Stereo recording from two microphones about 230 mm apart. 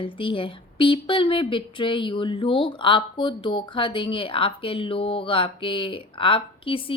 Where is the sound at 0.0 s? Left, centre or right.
Left.